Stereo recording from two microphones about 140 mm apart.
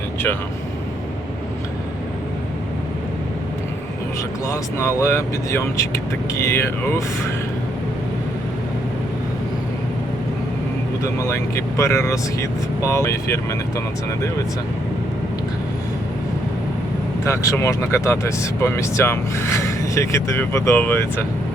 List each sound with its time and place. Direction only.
4.4 s speech: 20° left (ahead or behind)
11.0 s speech: 20° left (ahead or behind)
17.2 s speech: 20° left (ahead or behind)